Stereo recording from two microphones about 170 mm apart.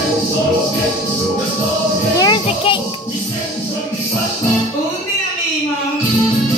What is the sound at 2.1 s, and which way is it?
Children playing, 25° left (ahead or behind).